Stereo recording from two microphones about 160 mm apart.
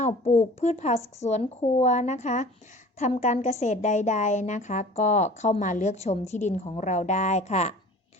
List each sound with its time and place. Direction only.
0.0 s a woman's voice: 45° left (ahead or behind)